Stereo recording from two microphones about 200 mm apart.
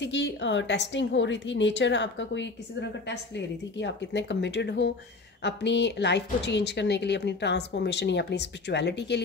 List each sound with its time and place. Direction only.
0.0 s a woman's voice: 60° left (ahead or behind)